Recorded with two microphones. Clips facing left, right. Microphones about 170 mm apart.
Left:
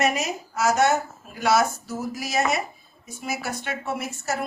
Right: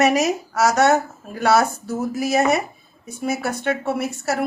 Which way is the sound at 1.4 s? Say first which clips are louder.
Right 4 dB; 60° right (ahead or behind).